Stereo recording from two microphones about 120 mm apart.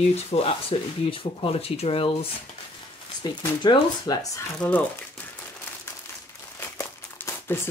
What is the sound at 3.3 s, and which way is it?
Speech, 35° left (ahead or behind).